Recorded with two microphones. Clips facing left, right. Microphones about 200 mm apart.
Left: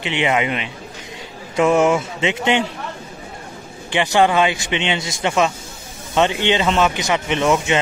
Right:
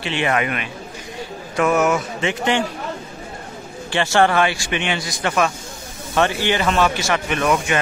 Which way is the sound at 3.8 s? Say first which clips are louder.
Left 1 dB; 15° left (ahead or behind).